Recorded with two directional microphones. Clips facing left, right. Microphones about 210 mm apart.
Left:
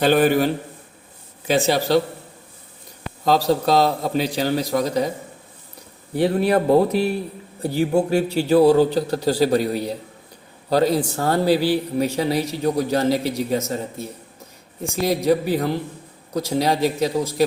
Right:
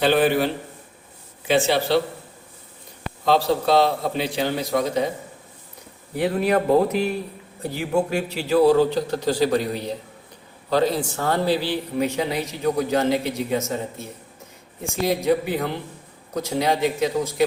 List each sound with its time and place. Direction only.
0.0 s a man's voice: 45° left (ahead or behind)
3.2 s a man's voice: 40° left (ahead or behind)
6.1 s a man's voice: 30° left (ahead or behind)